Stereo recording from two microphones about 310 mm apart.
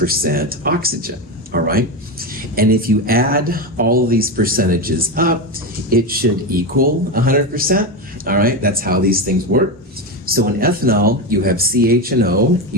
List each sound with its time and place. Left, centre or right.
0.0 s speech: right